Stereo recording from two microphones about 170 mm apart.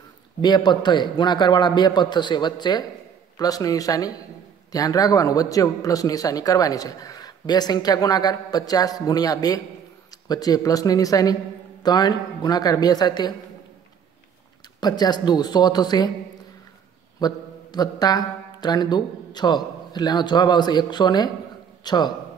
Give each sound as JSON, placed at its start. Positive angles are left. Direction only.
{"t": 0.4, "sound": "speech", "side_deg": 25}
{"t": 14.8, "sound": "speech", "side_deg": 25}
{"t": 17.2, "sound": "a man's voice", "side_deg": 25}